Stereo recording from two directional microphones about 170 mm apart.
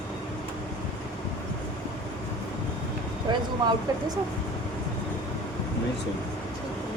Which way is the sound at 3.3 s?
30° right (ahead or behind).